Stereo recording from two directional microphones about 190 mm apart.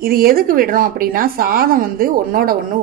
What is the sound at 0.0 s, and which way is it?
Speech, 50° right (ahead or behind).